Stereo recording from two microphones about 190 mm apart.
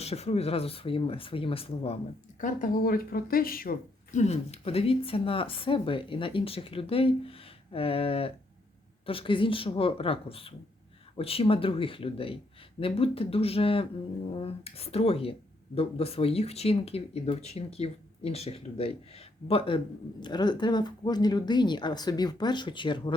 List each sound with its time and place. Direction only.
0.0 s speech: 30° left (ahead or behind)
2.4 s speech: 45° left (ahead or behind); by 23.1 s 25° left (ahead or behind)